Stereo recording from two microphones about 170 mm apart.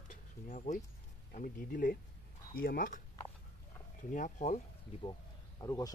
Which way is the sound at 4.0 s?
50° left (ahead or behind).